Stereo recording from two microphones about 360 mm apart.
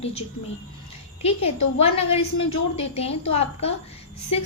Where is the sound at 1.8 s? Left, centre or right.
Centre.